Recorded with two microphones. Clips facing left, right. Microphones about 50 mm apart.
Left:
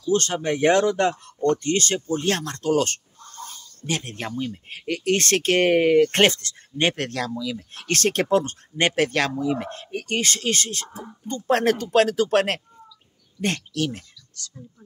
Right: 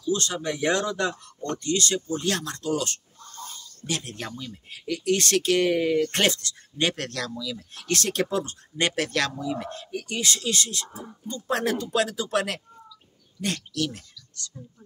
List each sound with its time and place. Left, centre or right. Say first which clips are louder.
0.1 s speech: left 5 dB; left